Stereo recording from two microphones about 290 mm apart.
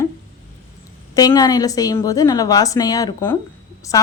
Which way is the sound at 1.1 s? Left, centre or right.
Centre.